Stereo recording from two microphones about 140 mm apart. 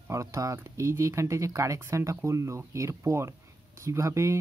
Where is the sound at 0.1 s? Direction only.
20° right (ahead or behind).